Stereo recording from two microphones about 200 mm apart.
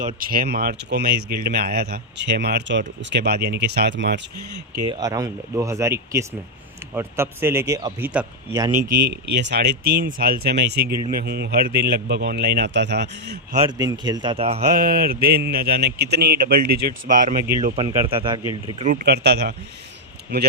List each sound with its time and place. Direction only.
0.2 s speech: 45° right (ahead or behind)
4.9 s speech: 15° right (ahead or behind)
8.0 s speech: 5° right (ahead or behind)
8.5 s speech: 15° right (ahead or behind)
8.9 s speech: 50° right (ahead or behind)
13.7 s speech: 20° right (ahead or behind)
14.8 s speech: 45° right (ahead or behind)
17.7 s speech: 25° right (ahead or behind)
18.8 s a man's voice: 40° right (ahead or behind)
19.0 s a man's voice: 55° right (ahead or behind)